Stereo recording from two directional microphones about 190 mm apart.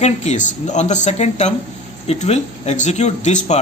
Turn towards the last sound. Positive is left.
turn(degrees=35)  # may be behind; listen again after turning